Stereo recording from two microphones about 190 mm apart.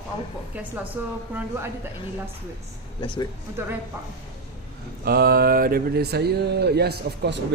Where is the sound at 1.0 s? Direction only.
10° right (ahead or behind).